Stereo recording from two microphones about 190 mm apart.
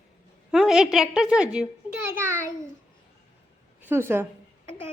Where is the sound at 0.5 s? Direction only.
5° right (ahead or behind).